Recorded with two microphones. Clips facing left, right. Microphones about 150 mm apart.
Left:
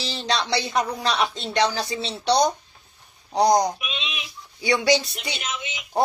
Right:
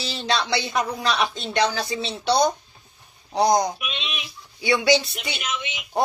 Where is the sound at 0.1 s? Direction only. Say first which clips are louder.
Right 1 dB; 35° left (ahead or behind).